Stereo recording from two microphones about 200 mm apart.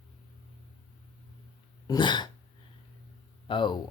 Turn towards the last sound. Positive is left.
turn(degrees=25)  # may be behind; listen again after turning